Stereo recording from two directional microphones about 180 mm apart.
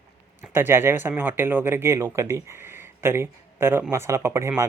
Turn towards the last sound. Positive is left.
turn(degrees=-15)  # may be behind; listen again after turning